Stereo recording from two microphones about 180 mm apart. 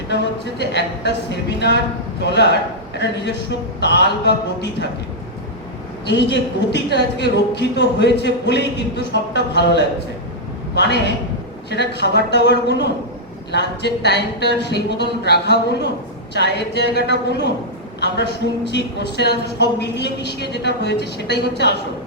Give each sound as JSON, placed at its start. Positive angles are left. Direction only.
{"t": 0.1, "sound": "a man's voice", "side_deg": 70}
{"t": 6.1, "sound": "a man's voice", "side_deg": 75}